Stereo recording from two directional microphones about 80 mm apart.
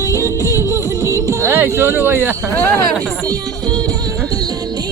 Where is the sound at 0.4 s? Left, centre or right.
Left.